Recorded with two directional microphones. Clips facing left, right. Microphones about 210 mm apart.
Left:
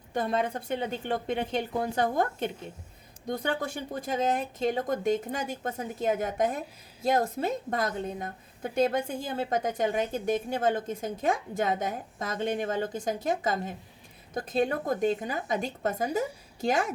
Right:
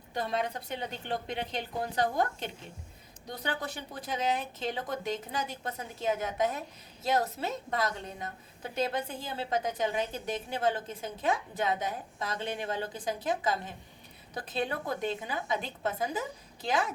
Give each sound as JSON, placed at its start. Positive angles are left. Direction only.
{"t": 0.1, "sound": "a woman's voice", "side_deg": 50}